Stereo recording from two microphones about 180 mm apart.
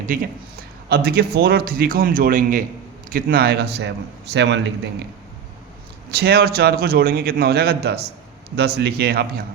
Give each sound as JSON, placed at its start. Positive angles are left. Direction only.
{"t": 0.0, "sound": "a man's voice", "side_deg": -50}
{"t": 6.1, "sound": "a man's voice", "side_deg": -60}